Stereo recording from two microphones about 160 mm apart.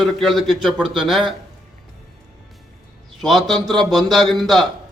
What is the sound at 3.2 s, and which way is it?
A man's voice, centre (ahead or behind).